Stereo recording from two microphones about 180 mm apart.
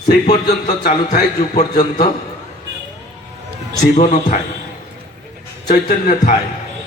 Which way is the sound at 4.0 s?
45° left (ahead or behind).